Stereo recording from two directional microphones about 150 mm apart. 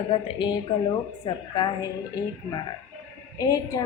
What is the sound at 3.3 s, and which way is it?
Speech, 25° left (ahead or behind).